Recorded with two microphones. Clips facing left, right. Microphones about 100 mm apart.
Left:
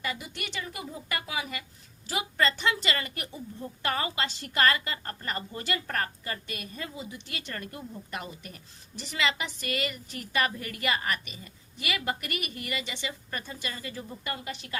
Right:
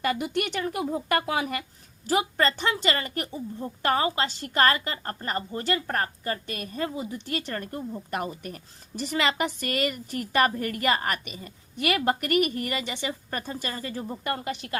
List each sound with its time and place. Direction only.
0.0 s a woman's voice: 55° right (ahead or behind)